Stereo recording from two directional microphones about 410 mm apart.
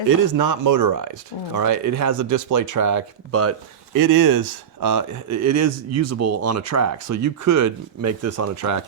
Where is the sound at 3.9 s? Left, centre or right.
Right.